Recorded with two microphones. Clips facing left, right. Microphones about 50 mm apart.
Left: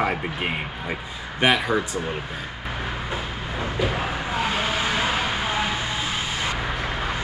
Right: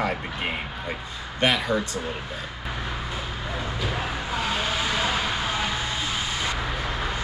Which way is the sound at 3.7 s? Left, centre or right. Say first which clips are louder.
Left 6 dB; centre.